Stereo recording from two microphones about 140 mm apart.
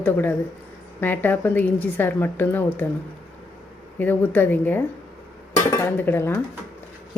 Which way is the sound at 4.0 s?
10° left (ahead or behind).